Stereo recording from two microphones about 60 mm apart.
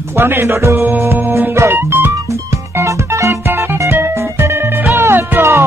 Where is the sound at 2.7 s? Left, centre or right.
Right.